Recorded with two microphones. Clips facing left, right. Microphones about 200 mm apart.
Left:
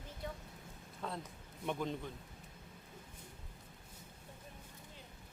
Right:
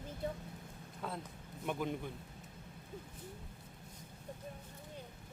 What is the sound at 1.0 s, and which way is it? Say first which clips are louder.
Speech: even; centre (ahead or behind).